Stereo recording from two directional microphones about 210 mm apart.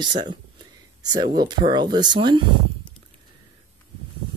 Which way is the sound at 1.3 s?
20° right (ahead or behind).